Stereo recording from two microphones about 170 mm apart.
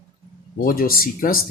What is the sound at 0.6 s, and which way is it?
Speech, 60° left (ahead or behind).